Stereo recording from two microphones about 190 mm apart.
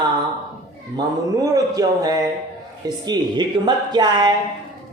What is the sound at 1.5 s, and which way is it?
Mantra, 20° right (ahead or behind).